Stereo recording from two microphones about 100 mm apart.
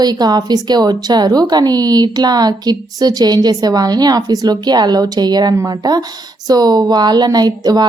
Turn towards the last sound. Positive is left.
turn(degrees=-45)  # may be behind; listen again after turning